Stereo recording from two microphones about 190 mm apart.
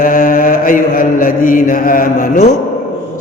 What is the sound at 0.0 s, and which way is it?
Mantra, 45° left (ahead or behind).